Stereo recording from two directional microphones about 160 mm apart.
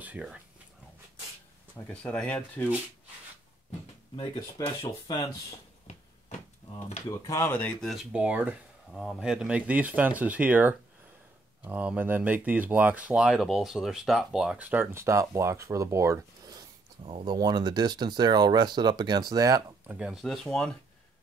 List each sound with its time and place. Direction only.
0.0 s speech: 5° right (ahead or behind)
1.8 s speech: 10° left (ahead or behind)
4.6 s speech: 25° left (ahead or behind)
5.9 s a sound: 45° left (ahead or behind)
7.1 s speech: 20° left (ahead or behind)
7.9 s speech: 5° right (ahead or behind)
19.9 s speech: 5° right (ahead or behind)